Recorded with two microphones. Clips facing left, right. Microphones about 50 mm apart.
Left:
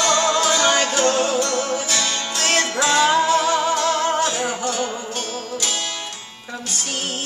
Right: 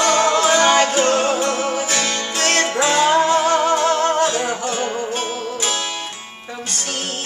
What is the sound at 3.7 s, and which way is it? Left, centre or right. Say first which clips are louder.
Music: right 3 dB; right.